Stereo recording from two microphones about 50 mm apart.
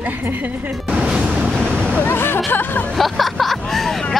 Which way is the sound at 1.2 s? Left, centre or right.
Right.